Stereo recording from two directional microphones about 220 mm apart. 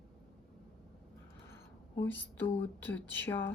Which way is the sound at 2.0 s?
10° left (ahead or behind).